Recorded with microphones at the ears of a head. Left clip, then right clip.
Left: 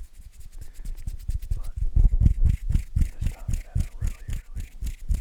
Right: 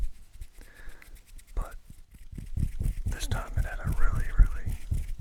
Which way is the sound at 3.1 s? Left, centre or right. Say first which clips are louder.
Right 6 dB; right.